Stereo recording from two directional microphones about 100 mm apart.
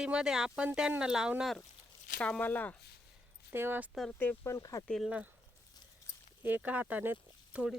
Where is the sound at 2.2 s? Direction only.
15° left (ahead or behind).